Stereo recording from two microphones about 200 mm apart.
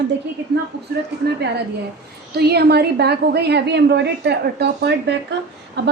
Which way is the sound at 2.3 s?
55° right (ahead or behind).